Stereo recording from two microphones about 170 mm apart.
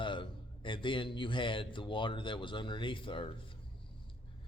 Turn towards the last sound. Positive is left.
turn(degrees=30)  # may be behind; listen again after turning